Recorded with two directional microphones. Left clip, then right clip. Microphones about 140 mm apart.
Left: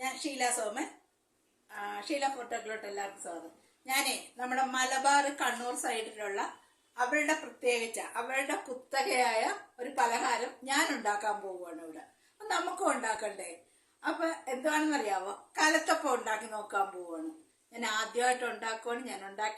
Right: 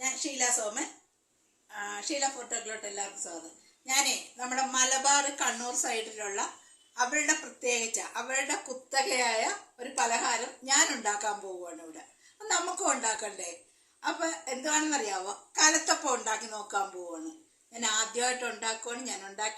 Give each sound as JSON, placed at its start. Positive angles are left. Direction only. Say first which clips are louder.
{"t": 0.0, "sound": "a woman's voice", "louder": "right 1 dB", "side_deg": 5}
{"t": 1.8, "sound": "speech", "louder": "right 1 dB", "side_deg": 15}